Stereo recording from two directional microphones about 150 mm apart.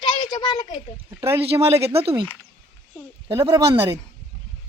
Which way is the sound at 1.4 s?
40° right (ahead or behind).